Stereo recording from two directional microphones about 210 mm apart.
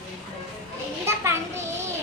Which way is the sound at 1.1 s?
15° right (ahead or behind).